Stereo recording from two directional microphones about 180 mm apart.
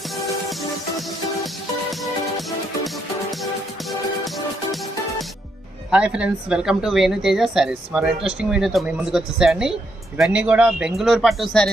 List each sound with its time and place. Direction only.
0.5 s music: centre (ahead or behind)
5.9 s a woman's voice: 5° right (ahead or behind)